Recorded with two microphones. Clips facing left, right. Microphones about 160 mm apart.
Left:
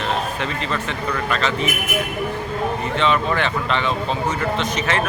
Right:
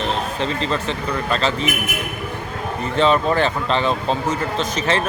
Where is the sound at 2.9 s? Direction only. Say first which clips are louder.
Right 5 dB; 35° right (ahead or behind).